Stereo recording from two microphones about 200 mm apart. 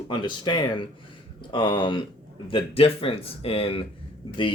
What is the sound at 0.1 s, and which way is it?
Speech, 25° left (ahead or behind).